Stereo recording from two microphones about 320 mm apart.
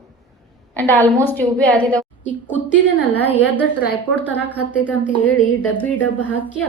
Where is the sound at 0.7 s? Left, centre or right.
Centre.